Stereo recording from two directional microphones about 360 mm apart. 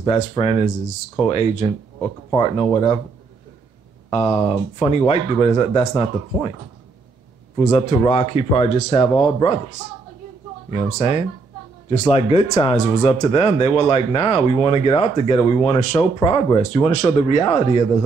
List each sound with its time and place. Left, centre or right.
0.0 s speech: centre
4.1 s speech: centre
7.5 s speech: centre
11.0 s speech: centre